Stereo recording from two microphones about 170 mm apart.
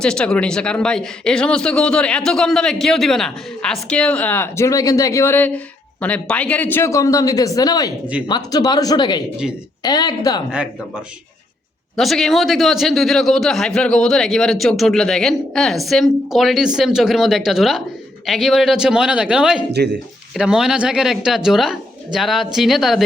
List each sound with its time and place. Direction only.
0.0 s speech: 5° left (ahead or behind); by 10.4 s 25° left (ahead or behind)
11.9 s a man's voice: centre (ahead or behind)
19.7 s speech: 75° right (ahead or behind)
20.3 s a man's voice: 5° right (ahead or behind)